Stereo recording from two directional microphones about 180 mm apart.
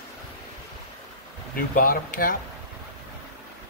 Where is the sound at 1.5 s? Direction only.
55° left (ahead or behind).